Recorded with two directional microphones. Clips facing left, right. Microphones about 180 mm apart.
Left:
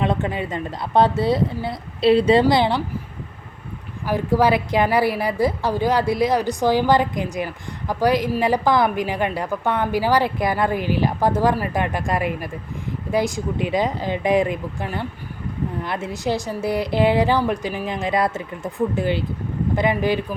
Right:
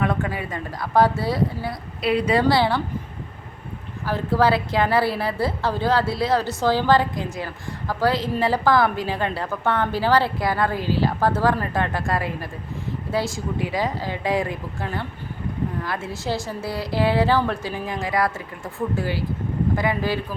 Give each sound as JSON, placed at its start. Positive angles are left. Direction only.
{"t": 0.0, "sound": "a woman's voice", "side_deg": 20}
{"t": 4.0, "sound": "a woman's voice", "side_deg": 15}